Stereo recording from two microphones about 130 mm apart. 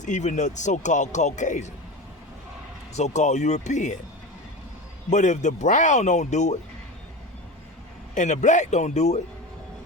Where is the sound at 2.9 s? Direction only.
65° left (ahead or behind).